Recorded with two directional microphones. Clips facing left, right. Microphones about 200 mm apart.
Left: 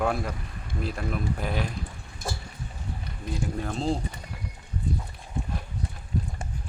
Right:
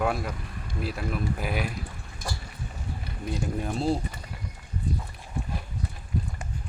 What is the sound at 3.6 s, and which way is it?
Speech, 10° right (ahead or behind).